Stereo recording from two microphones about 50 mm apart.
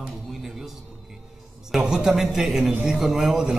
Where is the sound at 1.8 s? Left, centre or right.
Centre.